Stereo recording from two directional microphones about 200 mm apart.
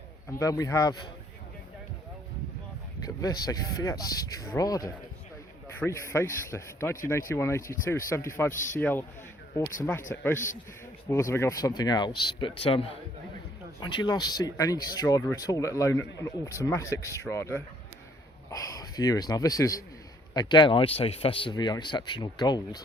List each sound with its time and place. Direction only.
0.3 s a man's voice: 15° left (ahead or behind)
3.0 s a man's voice: 20° left (ahead or behind)
11.1 s a man's voice: 15° left (ahead or behind)